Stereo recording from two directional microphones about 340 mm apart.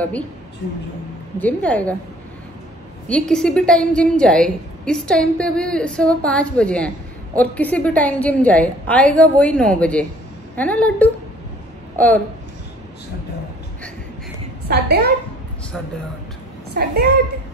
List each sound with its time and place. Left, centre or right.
1.4 s a woman's voice: centre
3.1 s a woman's voice: centre
14.7 s a woman's voice: right
16.7 s a woman's voice: right